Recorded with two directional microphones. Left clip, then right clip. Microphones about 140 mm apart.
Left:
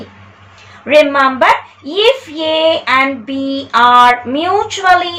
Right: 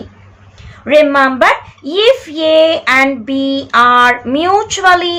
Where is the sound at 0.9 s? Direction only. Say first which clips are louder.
Even; 30° right (ahead or behind).